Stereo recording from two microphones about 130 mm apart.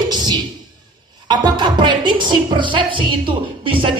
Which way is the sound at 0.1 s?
35° right (ahead or behind).